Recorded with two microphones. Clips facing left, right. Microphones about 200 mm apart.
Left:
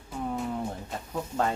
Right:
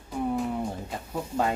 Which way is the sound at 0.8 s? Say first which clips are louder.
Right 1 dB; 5° right (ahead or behind).